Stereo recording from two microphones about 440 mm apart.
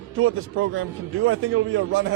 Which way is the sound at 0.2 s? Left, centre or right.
Right.